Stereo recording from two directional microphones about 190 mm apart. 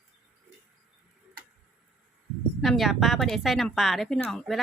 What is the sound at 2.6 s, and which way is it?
Speech, centre (ahead or behind).